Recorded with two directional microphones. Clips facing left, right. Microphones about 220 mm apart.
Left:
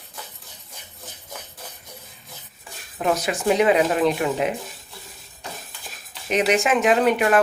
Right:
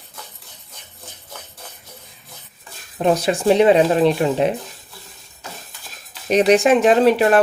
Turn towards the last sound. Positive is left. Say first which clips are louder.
# right 4 dB
turn(degrees=-30)  # may be behind; listen again after turning